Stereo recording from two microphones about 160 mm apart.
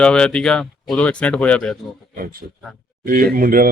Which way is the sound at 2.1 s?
65° right (ahead or behind).